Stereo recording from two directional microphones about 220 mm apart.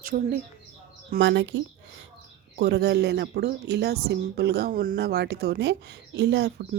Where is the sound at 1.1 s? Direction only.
55° right (ahead or behind).